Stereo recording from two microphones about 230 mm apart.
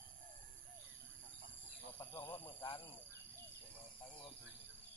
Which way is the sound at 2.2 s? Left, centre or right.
Centre.